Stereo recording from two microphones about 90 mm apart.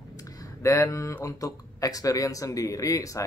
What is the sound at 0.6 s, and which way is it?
Speech, 40° left (ahead or behind).